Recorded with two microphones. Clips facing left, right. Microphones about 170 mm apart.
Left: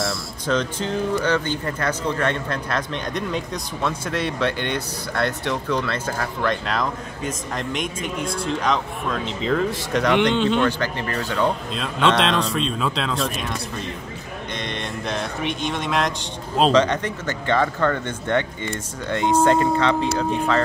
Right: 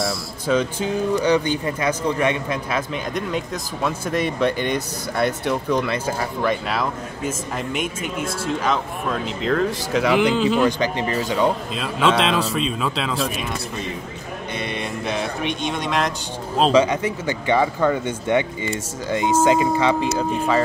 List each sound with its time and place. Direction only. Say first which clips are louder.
0.0 s speech: right 2 dB; 10° right (ahead or behind)
4.1 s speech: right 5 dB; 15° right (ahead or behind)
10.8 s speech: right 4 dB; 15° right (ahead or behind)
11.4 s speech: right 2 dB; 5° right (ahead or behind)
14.6 s speech: right 2 dB; 5° right (ahead or behind)